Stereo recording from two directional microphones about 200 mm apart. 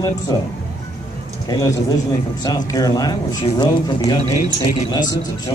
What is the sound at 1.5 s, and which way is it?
Speech, 20° left (ahead or behind).